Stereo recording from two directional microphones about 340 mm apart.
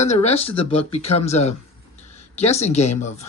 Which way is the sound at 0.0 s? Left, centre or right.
Centre.